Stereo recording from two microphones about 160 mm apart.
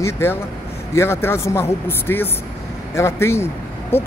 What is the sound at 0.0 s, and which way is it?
Speech, 15° left (ahead or behind).